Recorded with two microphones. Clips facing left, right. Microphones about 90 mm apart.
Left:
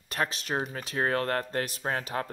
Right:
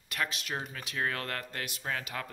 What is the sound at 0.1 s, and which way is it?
Speech, 35° left (ahead or behind).